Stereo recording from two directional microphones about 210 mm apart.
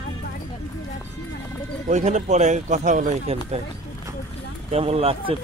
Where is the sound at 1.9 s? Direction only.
35° right (ahead or behind).